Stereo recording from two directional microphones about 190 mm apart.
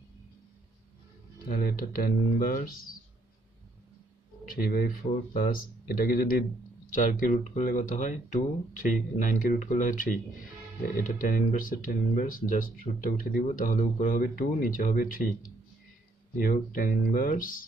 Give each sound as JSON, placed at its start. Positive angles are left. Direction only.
{"t": 1.6, "sound": "speech", "side_deg": 50}
{"t": 4.5, "sound": "speech", "side_deg": 50}
{"t": 16.3, "sound": "speech", "side_deg": 45}